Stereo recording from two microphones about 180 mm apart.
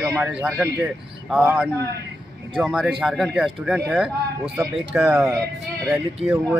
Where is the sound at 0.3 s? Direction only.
10° right (ahead or behind).